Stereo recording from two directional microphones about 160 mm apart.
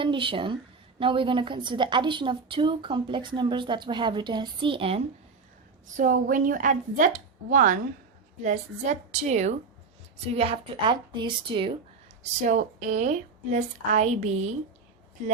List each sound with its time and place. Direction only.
0.0 s a woman's voice: 30° right (ahead or behind)
6.0 s a woman's voice: 55° right (ahead or behind); by 11.7 s 30° right (ahead or behind)
12.2 s speech: 50° right (ahead or behind)